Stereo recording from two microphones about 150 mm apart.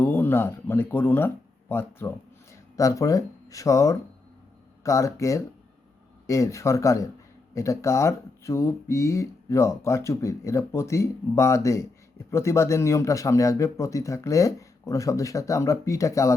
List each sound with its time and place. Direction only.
0.0 s speech: 15° left (ahead or behind)